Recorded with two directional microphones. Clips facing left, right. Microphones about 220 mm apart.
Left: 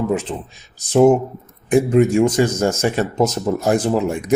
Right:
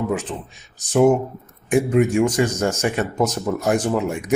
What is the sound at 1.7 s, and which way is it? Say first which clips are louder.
Speech: left 3 dB; 35° left (ahead or behind).